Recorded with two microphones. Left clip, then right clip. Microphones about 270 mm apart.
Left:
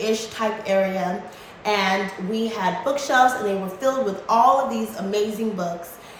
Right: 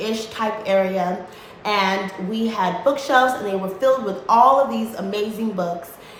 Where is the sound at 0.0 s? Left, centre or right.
Centre.